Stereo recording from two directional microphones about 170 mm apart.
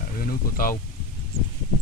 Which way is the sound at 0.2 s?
55° left (ahead or behind).